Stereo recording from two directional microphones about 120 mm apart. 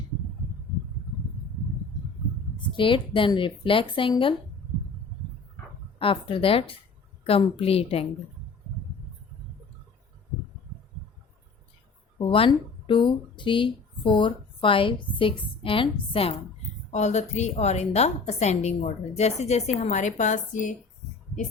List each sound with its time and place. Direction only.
2.6 s speech: 45° left (ahead or behind)
6.0 s speech: 45° left (ahead or behind)
12.2 s speech: 45° left (ahead or behind)
16.9 s a woman's voice: 70° left (ahead or behind); by 20.7 s 90° left